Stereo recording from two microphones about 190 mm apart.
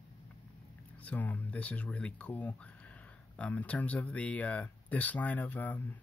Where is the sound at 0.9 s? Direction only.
10° left (ahead or behind).